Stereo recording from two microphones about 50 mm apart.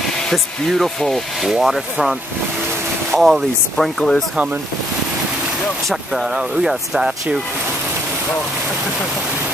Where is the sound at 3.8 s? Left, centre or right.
Centre.